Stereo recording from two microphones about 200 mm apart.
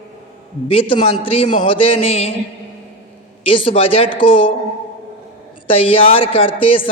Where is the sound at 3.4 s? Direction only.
25° left (ahead or behind).